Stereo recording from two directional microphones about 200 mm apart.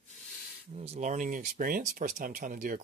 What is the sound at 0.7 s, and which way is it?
Speech, 30° right (ahead or behind).